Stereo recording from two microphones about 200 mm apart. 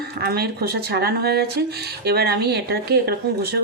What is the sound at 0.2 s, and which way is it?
Speech, 50° right (ahead or behind).